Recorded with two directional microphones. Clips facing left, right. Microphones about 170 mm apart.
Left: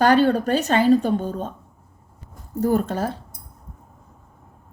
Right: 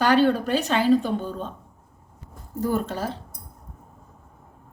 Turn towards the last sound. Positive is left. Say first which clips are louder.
# left 4 dB
turn(degrees=45)  # may be behind; listen again after turning